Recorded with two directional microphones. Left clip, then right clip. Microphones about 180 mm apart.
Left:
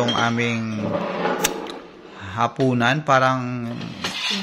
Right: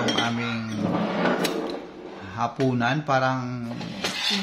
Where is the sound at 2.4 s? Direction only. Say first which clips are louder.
Left 5 dB; 35° left (ahead or behind).